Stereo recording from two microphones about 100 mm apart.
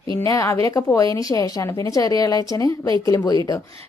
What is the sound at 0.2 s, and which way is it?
A woman's voice, 30° left (ahead or behind).